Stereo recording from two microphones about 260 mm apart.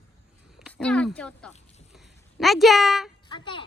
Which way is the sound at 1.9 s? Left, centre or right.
Centre.